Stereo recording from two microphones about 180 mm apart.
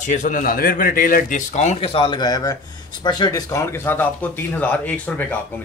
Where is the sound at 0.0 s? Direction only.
45° left (ahead or behind).